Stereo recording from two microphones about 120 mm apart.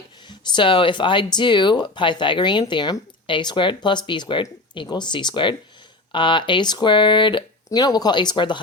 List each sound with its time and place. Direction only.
0.3 s speech: 40° left (ahead or behind)